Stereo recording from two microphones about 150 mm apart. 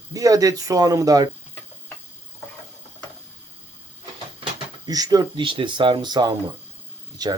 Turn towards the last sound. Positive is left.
turn(degrees=-25)  # may be behind; listen again after turning